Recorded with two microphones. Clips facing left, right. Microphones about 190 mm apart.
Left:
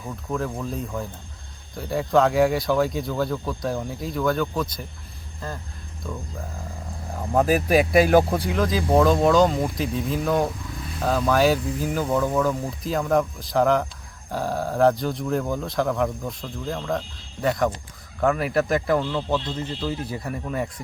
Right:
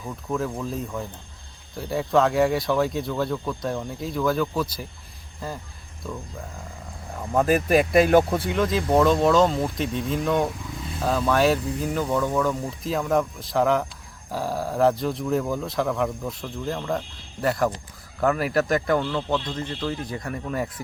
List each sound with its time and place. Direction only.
0.0 s speech: centre (ahead or behind)
7.1 s speech: centre (ahead or behind)